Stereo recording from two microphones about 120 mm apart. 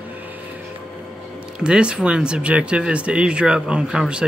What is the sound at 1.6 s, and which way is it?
Speech, 10° right (ahead or behind).